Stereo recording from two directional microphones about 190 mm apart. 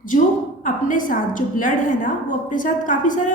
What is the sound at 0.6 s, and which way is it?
A woman's voice, 45° left (ahead or behind).